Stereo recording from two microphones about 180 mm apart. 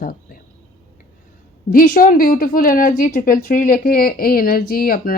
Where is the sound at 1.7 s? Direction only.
50° left (ahead or behind).